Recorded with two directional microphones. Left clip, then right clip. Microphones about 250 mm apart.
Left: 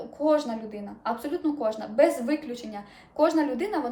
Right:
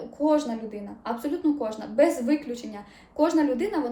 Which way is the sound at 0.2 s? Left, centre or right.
Centre.